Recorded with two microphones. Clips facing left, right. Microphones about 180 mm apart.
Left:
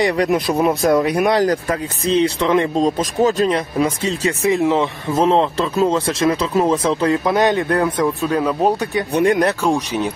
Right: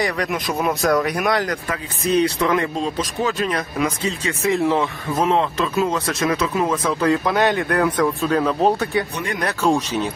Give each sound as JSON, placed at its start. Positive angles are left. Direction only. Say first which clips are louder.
{"t": 0.0, "sound": "speech", "louder": "left 6 dB", "side_deg": 30}
{"t": 2.8, "sound": "speech", "louder": "left 6 dB", "side_deg": 40}
{"t": 3.4, "sound": "speech", "louder": "left 4 dB", "side_deg": 25}
{"t": 9.1, "sound": "speech", "louder": "left 12 dB", "side_deg": 50}
{"t": 9.6, "sound": "speech", "louder": "left 1 dB", "side_deg": 15}